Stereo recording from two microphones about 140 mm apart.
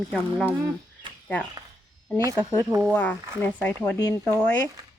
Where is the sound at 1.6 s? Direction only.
25° right (ahead or behind).